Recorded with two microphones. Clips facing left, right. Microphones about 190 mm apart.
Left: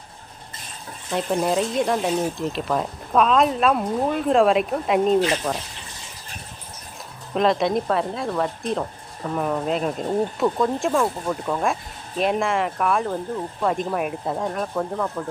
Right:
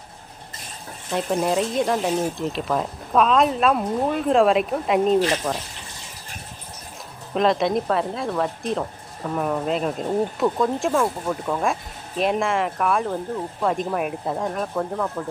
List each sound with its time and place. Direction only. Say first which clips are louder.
1.1 s speech: even; centre (ahead or behind)
7.3 s speech: even; centre (ahead or behind)